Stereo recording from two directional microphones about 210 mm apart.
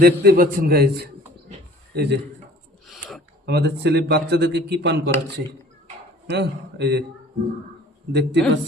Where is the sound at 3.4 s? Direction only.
50° right (ahead or behind).